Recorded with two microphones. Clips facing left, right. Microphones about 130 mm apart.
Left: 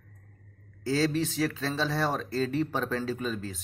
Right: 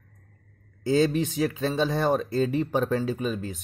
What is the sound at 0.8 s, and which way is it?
Speech, 20° right (ahead or behind).